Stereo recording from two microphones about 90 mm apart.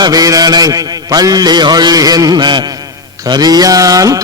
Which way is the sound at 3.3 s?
50° right (ahead or behind).